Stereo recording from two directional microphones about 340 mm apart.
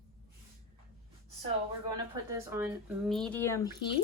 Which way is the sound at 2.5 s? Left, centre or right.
Centre.